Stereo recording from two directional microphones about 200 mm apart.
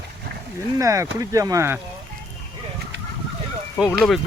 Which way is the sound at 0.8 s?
15° right (ahead or behind).